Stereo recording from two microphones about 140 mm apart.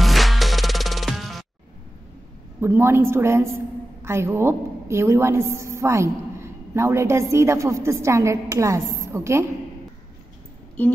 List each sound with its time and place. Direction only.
0.0 s music: centre (ahead or behind)
2.6 s a woman's voice: 15° right (ahead or behind)